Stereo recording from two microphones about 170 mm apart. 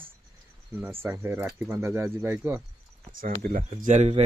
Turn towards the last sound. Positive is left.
turn(degrees=-40)  # may be behind; listen again after turning